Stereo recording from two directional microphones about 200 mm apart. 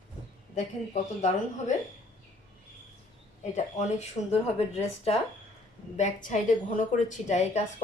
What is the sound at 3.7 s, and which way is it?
A woman's voice, 35° left (ahead or behind).